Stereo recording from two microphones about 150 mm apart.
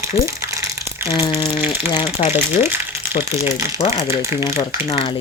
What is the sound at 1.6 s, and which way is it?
Speech, 30° left (ahead or behind).